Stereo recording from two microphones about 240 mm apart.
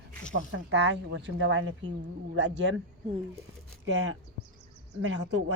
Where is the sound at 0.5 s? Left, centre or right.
Right.